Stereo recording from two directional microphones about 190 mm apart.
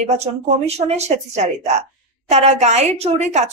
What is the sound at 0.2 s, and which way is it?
A woman's voice, 35° right (ahead or behind).